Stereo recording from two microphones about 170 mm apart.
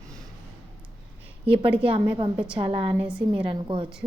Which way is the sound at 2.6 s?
35° right (ahead or behind).